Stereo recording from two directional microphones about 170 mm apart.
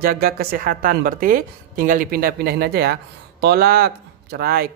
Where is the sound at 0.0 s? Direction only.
60° right (ahead or behind).